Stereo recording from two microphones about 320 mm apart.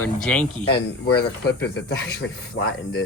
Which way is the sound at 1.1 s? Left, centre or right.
Left.